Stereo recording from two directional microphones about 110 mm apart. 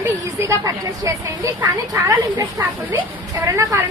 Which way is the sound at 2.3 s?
15° right (ahead or behind).